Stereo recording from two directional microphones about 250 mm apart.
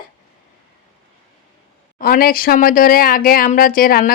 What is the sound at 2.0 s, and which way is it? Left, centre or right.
Speech, left.